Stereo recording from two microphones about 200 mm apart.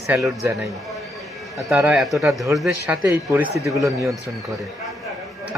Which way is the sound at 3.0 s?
10° right (ahead or behind).